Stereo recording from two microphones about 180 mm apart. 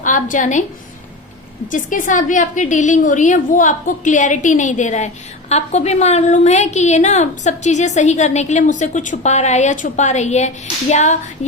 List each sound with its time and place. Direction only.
0.0 s a woman's voice: 45° left (ahead or behind)
1.6 s a woman's voice: 45° left (ahead or behind)